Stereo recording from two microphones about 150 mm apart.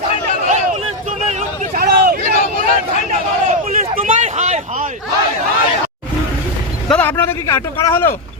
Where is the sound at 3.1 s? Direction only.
50° right (ahead or behind).